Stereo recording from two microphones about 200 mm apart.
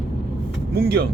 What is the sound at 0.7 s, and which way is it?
Speech, 50° right (ahead or behind).